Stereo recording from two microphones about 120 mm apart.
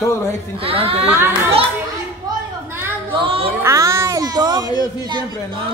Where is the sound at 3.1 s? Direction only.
50° right (ahead or behind).